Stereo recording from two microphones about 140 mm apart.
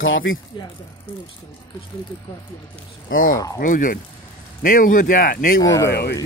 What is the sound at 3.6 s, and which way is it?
Speech, 75° left (ahead or behind).